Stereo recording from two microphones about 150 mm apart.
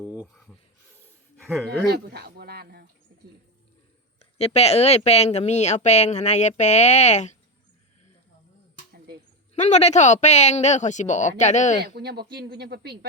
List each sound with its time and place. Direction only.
1.9 s a sound: 90° right
4.4 s speech: 45° left (ahead or behind)
9.6 s speech: 50° left (ahead or behind)
11.9 s speech: 90° right